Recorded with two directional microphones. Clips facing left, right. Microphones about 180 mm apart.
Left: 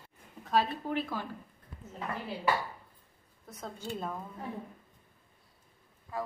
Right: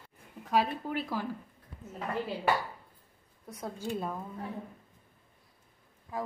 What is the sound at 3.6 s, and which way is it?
Speech, 10° right (ahead or behind).